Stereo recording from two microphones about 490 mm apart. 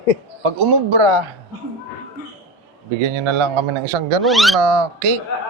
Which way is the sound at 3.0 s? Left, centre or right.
Right.